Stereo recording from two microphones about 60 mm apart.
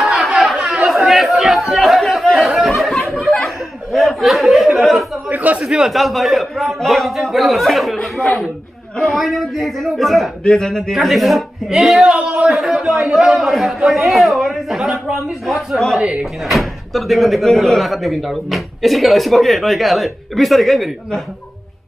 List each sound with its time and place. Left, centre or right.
0.0 s chatter: centre
2.3 s a sound: centre
5.3 s a sound: right
5.6 s a man's voice: centre
8.2 s speech: left
9.0 s speech: centre
12.1 s a sound: centre
12.4 s speech: centre
16.0 s speech: centre
16.4 s speech: centre